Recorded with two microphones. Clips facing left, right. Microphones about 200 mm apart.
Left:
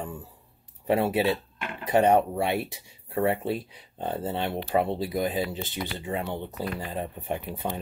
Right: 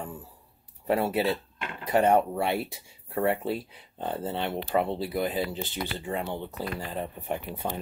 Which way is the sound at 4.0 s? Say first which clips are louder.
Left 1 dB; 20° left (ahead or behind).